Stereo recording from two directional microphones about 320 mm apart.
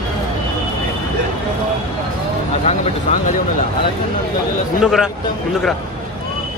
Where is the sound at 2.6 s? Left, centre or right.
Left.